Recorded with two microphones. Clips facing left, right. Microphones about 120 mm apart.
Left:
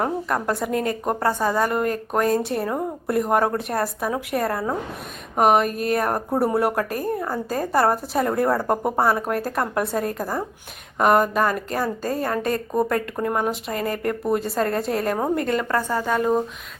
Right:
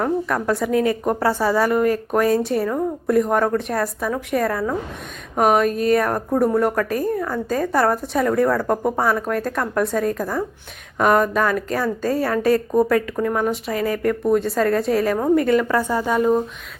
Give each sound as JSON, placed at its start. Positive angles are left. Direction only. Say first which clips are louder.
{"t": 0.4, "sound": "a woman's voice", "louder": "right 4 dB", "side_deg": 0}
{"t": 1.3, "sound": "a woman's voice", "louder": "right 3 dB", "side_deg": 15}
{"t": 1.6, "sound": "a woman's voice", "louder": "right 4 dB", "side_deg": 0}